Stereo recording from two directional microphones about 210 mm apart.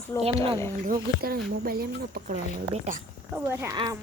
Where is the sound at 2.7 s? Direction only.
35° right (ahead or behind).